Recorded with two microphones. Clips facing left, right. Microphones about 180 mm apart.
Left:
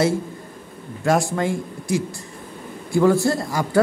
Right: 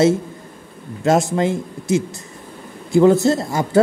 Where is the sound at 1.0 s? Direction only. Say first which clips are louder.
Right 3 dB; 20° right (ahead or behind).